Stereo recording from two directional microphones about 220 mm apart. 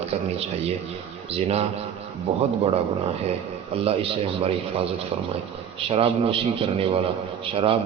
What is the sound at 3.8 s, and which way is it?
A man's voice, 25° right (ahead or behind).